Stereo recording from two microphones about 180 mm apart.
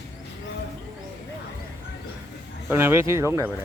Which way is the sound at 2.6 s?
15° right (ahead or behind).